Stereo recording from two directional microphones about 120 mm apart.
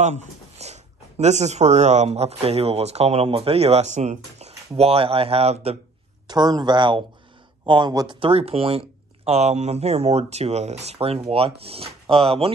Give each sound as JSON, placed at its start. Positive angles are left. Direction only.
{"t": 0.0, "sound": "speech", "side_deg": -70}
{"t": 6.2, "sound": "speech", "side_deg": -35}
{"t": 8.2, "sound": "speech", "side_deg": -55}